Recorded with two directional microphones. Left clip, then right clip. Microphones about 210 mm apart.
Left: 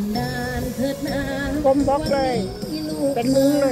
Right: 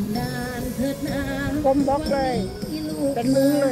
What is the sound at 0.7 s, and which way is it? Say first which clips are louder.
Speech: left 1 dB; 5° left (ahead or behind).